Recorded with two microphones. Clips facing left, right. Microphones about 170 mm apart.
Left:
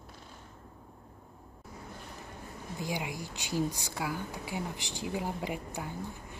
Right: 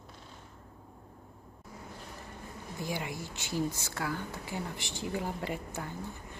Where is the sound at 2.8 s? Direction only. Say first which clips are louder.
Even; 15° left (ahead or behind).